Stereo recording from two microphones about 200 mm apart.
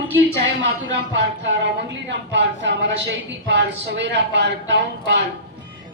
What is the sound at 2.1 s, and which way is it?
A woman's voice, 60° right (ahead or behind).